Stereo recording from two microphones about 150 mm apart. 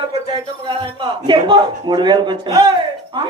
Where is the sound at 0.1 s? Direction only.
30° right (ahead or behind).